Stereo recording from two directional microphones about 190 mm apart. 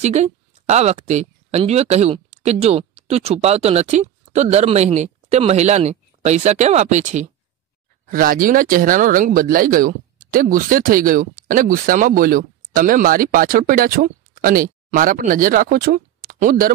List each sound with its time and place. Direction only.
0.0 s speech: 35° right (ahead or behind)